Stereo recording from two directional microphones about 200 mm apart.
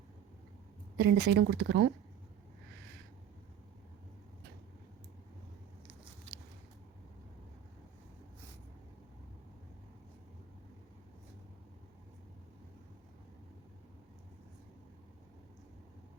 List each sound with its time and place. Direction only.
0.9 s speech: 55° right (ahead or behind)